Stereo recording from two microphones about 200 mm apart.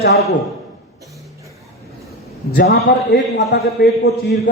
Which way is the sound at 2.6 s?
60° left (ahead or behind).